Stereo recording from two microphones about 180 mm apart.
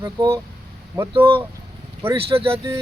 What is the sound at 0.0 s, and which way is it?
Speech, 20° right (ahead or behind).